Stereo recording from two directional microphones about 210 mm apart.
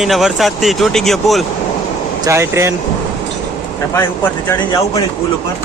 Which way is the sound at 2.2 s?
15° right (ahead or behind).